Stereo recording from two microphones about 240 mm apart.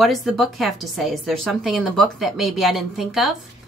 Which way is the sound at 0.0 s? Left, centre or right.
Centre.